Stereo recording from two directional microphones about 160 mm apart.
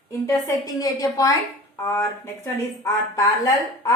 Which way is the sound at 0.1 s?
20° left (ahead or behind).